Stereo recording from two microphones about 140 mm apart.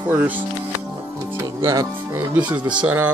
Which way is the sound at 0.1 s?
10° right (ahead or behind).